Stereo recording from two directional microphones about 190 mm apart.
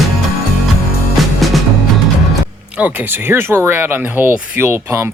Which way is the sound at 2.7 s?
10° right (ahead or behind).